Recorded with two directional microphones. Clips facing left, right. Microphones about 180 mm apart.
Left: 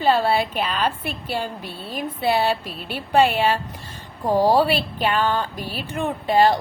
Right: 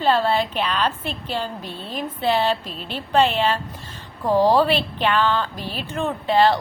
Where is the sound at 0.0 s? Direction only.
10° left (ahead or behind).